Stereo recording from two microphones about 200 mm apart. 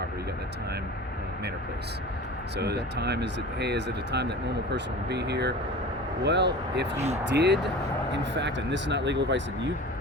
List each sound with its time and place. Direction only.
2.6 s speech: 55° right (ahead or behind)
6.9 s speech: 35° right (ahead or behind)
7.3 s speech: 60° right (ahead or behind)